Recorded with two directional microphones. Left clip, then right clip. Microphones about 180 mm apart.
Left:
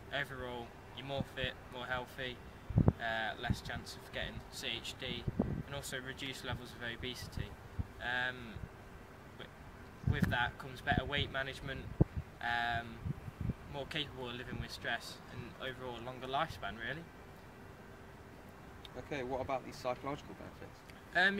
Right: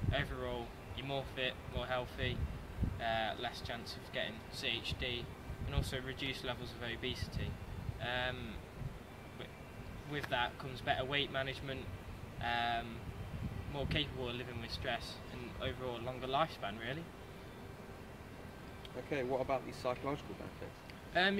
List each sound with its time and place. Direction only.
0.1 s speech: 5° left (ahead or behind)
10.1 s speech: 5° left (ahead or behind)
19.0 s speech: 35° left (ahead or behind)
21.1 s speech: 5° left (ahead or behind)